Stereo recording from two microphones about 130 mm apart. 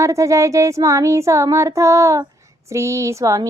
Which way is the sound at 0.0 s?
25° right (ahead or behind).